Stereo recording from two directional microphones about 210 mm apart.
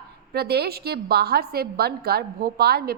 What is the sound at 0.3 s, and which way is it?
A woman's voice, 50° right (ahead or behind).